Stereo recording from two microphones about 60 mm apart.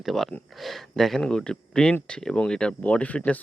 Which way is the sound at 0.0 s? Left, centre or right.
Centre.